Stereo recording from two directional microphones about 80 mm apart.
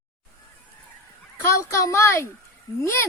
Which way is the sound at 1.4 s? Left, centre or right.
Left.